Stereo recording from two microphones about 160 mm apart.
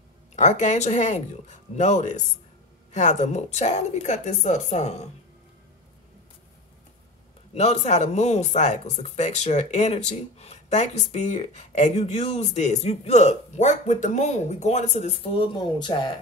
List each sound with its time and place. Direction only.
0.4 s speech: 50° left (ahead or behind)
7.5 s speech: 45° left (ahead or behind)